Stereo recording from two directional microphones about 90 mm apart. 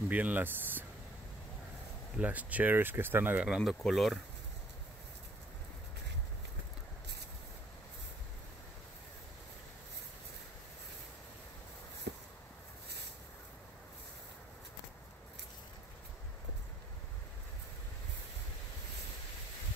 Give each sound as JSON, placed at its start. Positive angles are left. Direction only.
{"t": 0.1, "sound": "speech", "side_deg": -20}
{"t": 2.1, "sound": "speech", "side_deg": -15}
{"t": 3.4, "sound": "speech", "side_deg": -5}